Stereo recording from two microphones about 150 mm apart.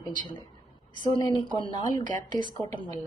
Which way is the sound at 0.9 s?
30° left (ahead or behind).